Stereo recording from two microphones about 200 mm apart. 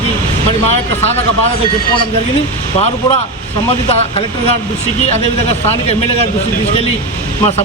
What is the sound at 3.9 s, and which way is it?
Speech, 30° left (ahead or behind).